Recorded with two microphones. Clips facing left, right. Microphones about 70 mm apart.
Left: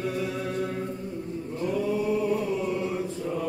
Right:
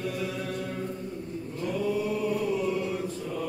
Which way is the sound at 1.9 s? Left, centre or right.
Left.